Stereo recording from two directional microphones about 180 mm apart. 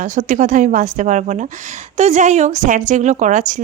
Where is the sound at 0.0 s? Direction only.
45° right (ahead or behind).